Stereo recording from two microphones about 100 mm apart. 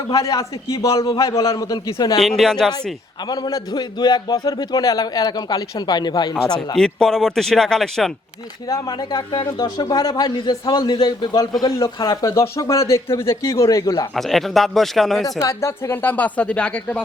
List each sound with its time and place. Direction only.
0.1 s a man's voice: 35° left (ahead or behind)
2.1 s speech: 5° left (ahead or behind)
3.2 s a man's voice: 45° left (ahead or behind)
6.7 s speech: 5° left (ahead or behind)
8.6 s a man's voice: 40° left (ahead or behind)
14.1 s speech: centre (ahead or behind)
15.3 s speech: 35° left (ahead or behind); by 17.0 s 10° left (ahead or behind)